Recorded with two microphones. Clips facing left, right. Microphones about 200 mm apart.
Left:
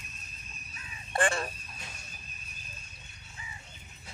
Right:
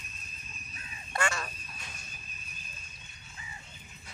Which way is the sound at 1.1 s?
30° left (ahead or behind).